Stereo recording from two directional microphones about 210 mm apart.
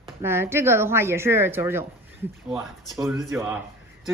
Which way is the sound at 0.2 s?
10° right (ahead or behind).